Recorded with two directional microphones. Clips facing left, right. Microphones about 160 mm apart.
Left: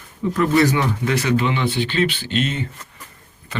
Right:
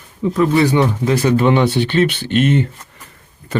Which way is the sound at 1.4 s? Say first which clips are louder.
Right 7 dB; 50° right (ahead or behind).